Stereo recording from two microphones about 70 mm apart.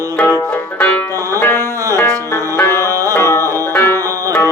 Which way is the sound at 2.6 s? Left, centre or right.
Left.